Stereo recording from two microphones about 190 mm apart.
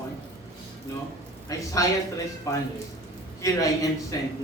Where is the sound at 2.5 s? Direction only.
15° left (ahead or behind).